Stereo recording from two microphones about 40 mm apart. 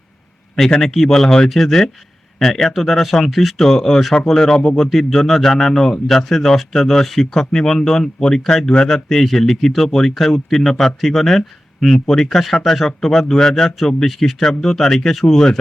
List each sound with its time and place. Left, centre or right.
0.8 s speech: centre
3.6 s speech: centre
4.9 s speech: centre